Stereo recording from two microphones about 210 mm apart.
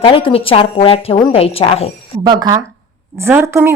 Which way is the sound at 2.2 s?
20° right (ahead or behind).